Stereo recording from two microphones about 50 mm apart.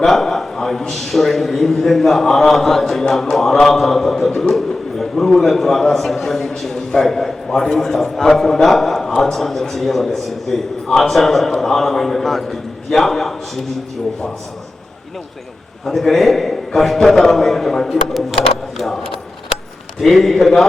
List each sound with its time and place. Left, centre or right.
0.0 s a man's voice: centre
4.3 s a man's voice: centre
4.5 s a man's voice: centre
15.9 s a man's voice: centre